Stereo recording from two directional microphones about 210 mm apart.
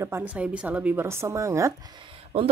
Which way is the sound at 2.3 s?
30° right (ahead or behind).